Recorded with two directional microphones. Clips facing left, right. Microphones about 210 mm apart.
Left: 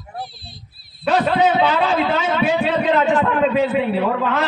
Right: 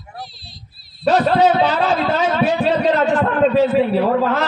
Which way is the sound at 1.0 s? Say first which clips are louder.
Right 3 dB; 40° right (ahead or behind).